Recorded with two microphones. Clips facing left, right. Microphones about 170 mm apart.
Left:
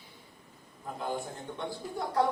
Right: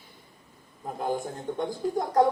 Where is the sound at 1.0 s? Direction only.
45° right (ahead or behind).